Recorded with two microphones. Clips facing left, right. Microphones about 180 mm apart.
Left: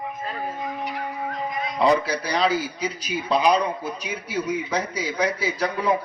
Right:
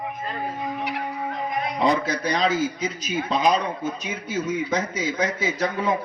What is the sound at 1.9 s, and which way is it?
A man's voice, 35° left (ahead or behind).